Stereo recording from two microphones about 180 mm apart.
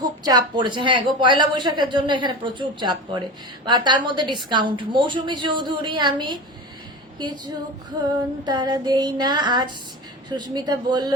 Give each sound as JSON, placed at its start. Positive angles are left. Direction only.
{"t": 0.2, "sound": "a woman's voice", "side_deg": -20}